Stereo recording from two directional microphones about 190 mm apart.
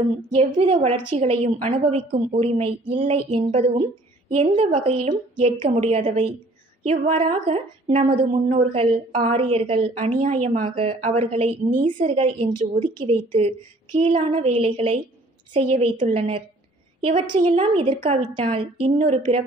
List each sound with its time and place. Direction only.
0.3 s a woman's voice: 30° right (ahead or behind)
12.2 s a woman's voice: 30° right (ahead or behind)